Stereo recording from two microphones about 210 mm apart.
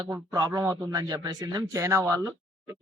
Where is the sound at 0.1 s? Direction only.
15° right (ahead or behind).